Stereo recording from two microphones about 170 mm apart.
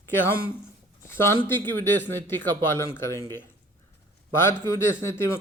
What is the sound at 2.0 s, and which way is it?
A man's voice, 15° left (ahead or behind).